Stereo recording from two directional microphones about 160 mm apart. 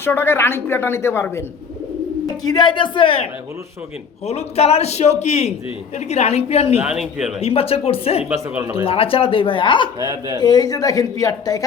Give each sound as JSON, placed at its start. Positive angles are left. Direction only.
{"t": 0.0, "sound": "a woman's voice", "side_deg": 15}
{"t": 2.4, "sound": "a man's voice", "side_deg": 25}
{"t": 4.3, "sound": "a man's voice", "side_deg": 40}
{"t": 6.7, "sound": "a man's voice", "side_deg": -5}
{"t": 7.4, "sound": "a man's voice", "side_deg": 35}
{"t": 8.3, "sound": "speech", "side_deg": -5}
{"t": 8.7, "sound": "a man's voice", "side_deg": 35}